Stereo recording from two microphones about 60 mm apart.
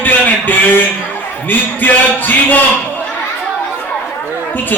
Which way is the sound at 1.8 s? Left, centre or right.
Left.